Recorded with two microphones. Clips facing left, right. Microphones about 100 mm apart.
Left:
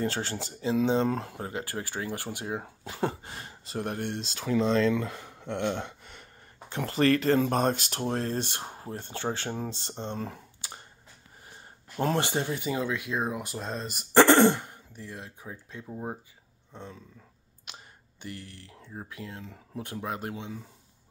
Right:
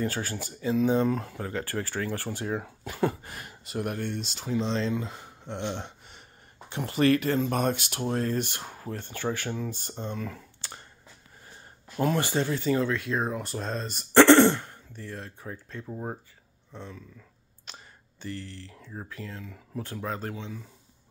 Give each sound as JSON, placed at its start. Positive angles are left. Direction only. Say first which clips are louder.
{"t": 0.0, "sound": "speech", "louder": "even", "side_deg": 25}
{"t": 1.5, "sound": "speech", "louder": "right 5 dB", "side_deg": 15}
{"t": 4.0, "sound": "speech", "louder": "even", "side_deg": 80}
{"t": 4.6, "sound": "speech", "louder": "left 7 dB", "side_deg": 50}
{"t": 4.9, "sound": "speech", "louder": "left 2 dB", "side_deg": 90}
{"t": 6.9, "sound": "speech", "louder": "even", "side_deg": 40}
{"t": 8.8, "sound": "speech", "louder": "right 2 dB", "side_deg": 20}
{"t": 12.2, "sound": "speech", "louder": "right 2 dB", "side_deg": 20}
{"t": 18.2, "sound": "speech", "louder": "right 4 dB", "side_deg": 15}
{"t": 19.4, "sound": "speech", "louder": "right 2 dB", "side_deg": 30}
{"t": 19.8, "sound": "speech", "louder": "right 1 dB", "side_deg": 15}